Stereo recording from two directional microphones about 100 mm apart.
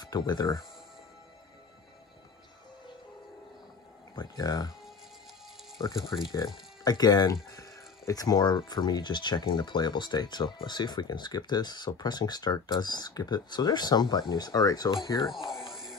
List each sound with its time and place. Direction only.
0.0 s speech: 40° left (ahead or behind)
4.1 s speech: 40° left (ahead or behind)
5.8 s speech: 40° left (ahead or behind)
15.2 s a sound: 5° right (ahead or behind)